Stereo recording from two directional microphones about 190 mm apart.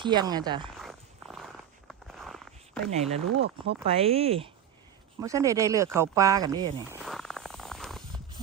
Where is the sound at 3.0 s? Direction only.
35° right (ahead or behind).